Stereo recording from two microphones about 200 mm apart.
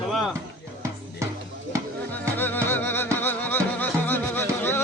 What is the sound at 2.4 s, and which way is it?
Music, 10° left (ahead or behind).